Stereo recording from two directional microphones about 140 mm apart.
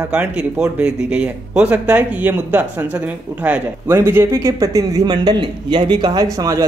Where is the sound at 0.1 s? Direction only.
5° right (ahead or behind).